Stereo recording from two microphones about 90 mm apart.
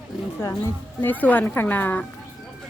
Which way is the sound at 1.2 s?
20° left (ahead or behind).